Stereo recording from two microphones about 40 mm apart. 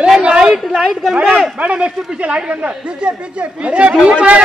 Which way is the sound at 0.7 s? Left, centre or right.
Centre.